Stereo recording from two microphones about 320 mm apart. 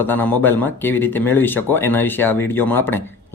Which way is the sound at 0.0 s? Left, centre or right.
Centre.